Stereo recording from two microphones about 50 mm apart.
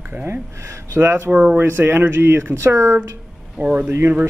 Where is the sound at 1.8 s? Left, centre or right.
Right.